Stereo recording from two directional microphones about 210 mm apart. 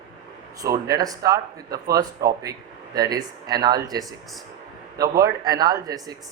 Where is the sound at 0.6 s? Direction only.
15° right (ahead or behind).